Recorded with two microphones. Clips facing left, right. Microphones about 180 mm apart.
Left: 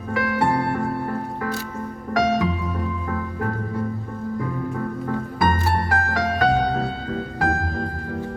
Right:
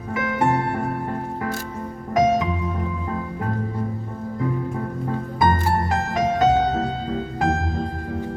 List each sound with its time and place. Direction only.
0.1 s music: 20° right (ahead or behind)
5.4 s music: 20° right (ahead or behind)